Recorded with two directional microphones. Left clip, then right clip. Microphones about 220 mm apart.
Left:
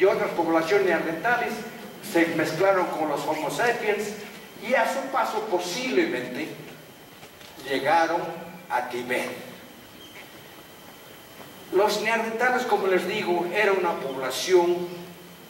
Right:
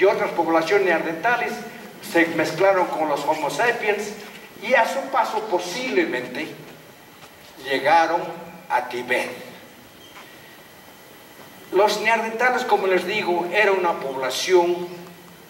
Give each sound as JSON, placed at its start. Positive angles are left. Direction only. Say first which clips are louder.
{"t": 0.0, "sound": "a man's voice", "louder": "right 3 dB", "side_deg": 10}
{"t": 0.3, "sound": "speech", "louder": "right 3 dB", "side_deg": 20}
{"t": 0.6, "sound": "a man's voice", "louder": "right 3 dB", "side_deg": 5}
{"t": 7.6, "sound": "a man's voice", "louder": "right 4 dB", "side_deg": 5}
{"t": 11.7, "sound": "a man's voice", "louder": "right 4 dB", "side_deg": 5}